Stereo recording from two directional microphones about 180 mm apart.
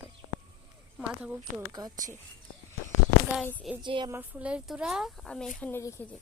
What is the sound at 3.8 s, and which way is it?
Speech, 25° right (ahead or behind).